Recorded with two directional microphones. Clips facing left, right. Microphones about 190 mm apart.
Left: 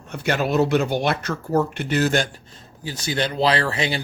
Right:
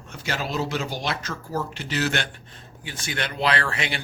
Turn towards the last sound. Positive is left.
turn(degrees=35)  # may be behind; listen again after turning